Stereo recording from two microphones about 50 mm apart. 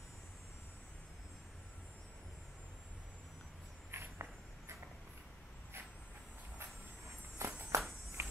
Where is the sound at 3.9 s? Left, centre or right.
Right.